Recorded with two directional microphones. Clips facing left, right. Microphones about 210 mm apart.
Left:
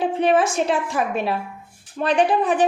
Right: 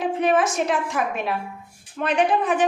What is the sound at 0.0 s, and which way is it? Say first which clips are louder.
A woman's voice: left 2 dB; 30° left (ahead or behind).